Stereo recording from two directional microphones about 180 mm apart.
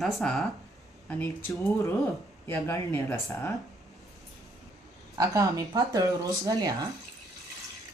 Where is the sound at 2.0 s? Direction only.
15° left (ahead or behind).